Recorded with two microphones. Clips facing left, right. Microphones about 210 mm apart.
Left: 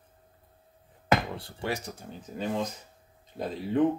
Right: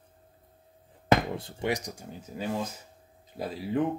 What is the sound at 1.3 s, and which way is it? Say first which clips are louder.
Speech: right 3 dB; 20° right (ahead or behind).